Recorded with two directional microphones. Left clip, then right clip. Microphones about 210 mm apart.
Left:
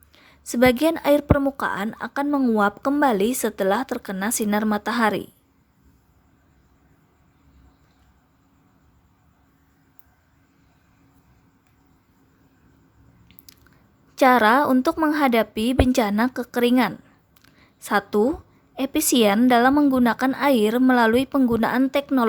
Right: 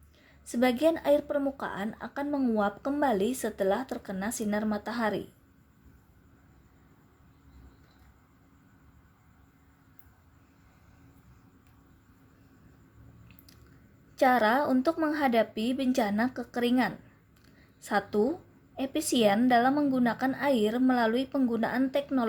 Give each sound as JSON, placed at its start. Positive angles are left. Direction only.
{"t": 0.1, "sound": "a woman's voice", "side_deg": 30}
{"t": 14.2, "sound": "a woman's voice", "side_deg": 30}
{"t": 17.4, "sound": "a sound", "side_deg": 25}
{"t": 18.8, "sound": "a woman's voice", "side_deg": 30}